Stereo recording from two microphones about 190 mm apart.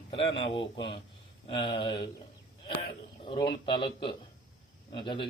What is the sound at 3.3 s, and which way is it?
Speech, 25° left (ahead or behind).